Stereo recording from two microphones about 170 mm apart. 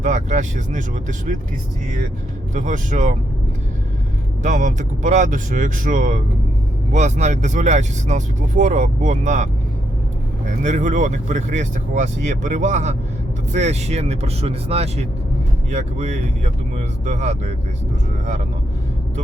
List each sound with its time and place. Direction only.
0.0 s speech: 45° right (ahead or behind)
2.6 s speech: 45° right (ahead or behind)
4.4 s speech: 45° right (ahead or behind)
10.6 s speech: 45° right (ahead or behind)